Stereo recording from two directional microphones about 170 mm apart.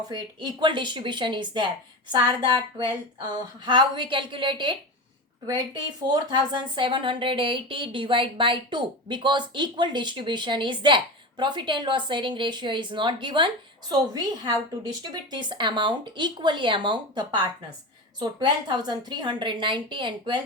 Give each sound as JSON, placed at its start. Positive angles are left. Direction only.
{"t": 0.1, "sound": "speech", "side_deg": -25}